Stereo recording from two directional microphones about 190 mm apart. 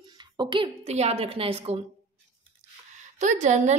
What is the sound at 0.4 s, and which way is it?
A woman's voice, 25° right (ahead or behind).